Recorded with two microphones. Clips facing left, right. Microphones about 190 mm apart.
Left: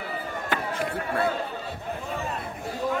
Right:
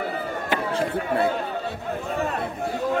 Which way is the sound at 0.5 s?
25° right (ahead or behind).